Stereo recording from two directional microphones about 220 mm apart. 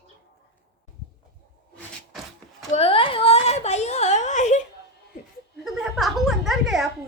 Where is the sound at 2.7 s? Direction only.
25° left (ahead or behind).